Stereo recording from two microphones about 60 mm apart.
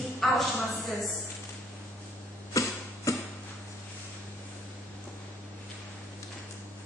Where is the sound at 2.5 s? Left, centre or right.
Left.